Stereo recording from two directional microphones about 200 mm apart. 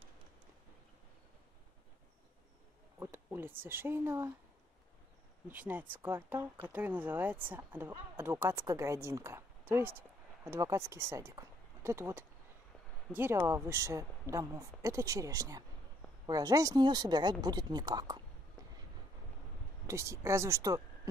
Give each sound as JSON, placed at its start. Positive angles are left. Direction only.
{"t": 3.0, "sound": "speech", "side_deg": -10}
{"t": 5.5, "sound": "a woman's voice", "side_deg": -10}
{"t": 19.9, "sound": "speech", "side_deg": -15}